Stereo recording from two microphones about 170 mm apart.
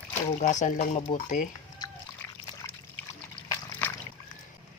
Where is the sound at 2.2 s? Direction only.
10° left (ahead or behind).